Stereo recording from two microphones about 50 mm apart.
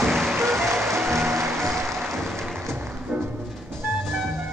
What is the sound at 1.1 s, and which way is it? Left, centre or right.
Music, right.